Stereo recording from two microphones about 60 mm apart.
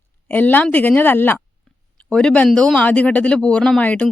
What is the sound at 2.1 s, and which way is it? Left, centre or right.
Speech, centre.